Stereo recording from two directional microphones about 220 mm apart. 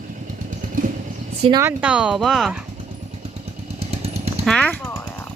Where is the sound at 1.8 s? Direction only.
5° right (ahead or behind).